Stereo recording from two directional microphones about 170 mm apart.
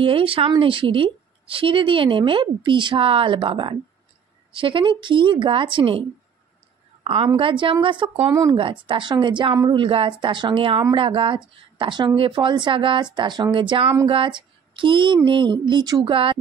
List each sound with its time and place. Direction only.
0.0 s a woman's voice: 30° right (ahead or behind)
7.0 s a sound: 35° right (ahead or behind)
7.3 s speech: 30° right (ahead or behind)